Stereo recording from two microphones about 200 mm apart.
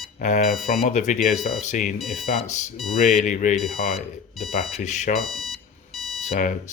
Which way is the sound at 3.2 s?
40° left (ahead or behind).